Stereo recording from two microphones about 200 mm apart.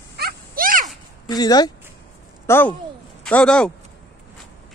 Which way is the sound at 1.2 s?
20° left (ahead or behind).